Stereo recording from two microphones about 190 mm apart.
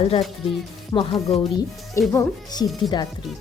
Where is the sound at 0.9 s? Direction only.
20° left (ahead or behind).